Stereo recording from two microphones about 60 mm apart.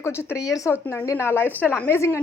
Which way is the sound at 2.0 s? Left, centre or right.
Left.